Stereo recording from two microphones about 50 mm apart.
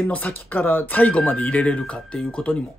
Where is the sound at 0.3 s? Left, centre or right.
Left.